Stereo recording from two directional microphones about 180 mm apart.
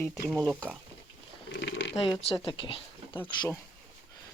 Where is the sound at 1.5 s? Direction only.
85° left.